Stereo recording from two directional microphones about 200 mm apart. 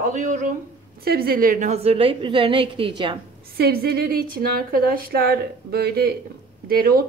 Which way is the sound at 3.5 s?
50° right (ahead or behind).